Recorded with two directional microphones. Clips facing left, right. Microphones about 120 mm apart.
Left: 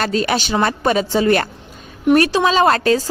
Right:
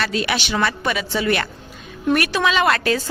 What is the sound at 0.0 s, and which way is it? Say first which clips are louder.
A woman's voice: left 4 dB; 40° left (ahead or behind).